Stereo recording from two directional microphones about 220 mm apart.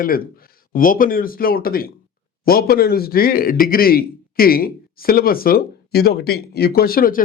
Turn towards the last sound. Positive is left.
turn(degrees=40)  # may be behind; listen again after turning